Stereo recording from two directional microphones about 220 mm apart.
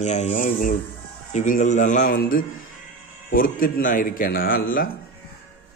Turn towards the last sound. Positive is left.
turn(degrees=40)  # may be behind; listen again after turning